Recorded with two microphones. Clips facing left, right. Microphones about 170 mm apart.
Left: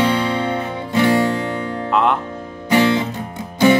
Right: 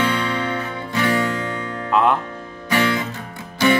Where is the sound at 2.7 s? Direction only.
20° left (ahead or behind).